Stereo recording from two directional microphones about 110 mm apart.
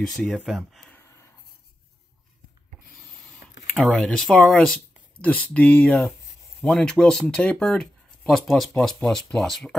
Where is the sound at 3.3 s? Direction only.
5° left (ahead or behind).